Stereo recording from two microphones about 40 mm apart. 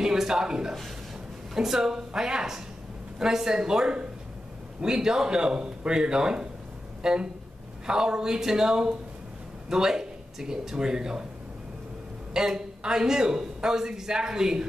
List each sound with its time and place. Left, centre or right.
0.0 s a man's voice: centre
12.4 s a man's voice: centre